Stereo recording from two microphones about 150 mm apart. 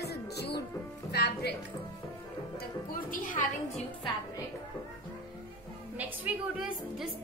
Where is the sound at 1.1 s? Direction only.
90° left.